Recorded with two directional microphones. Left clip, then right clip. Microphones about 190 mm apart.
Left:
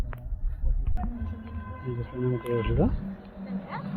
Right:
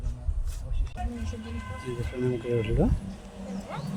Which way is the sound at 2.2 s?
15° right (ahead or behind).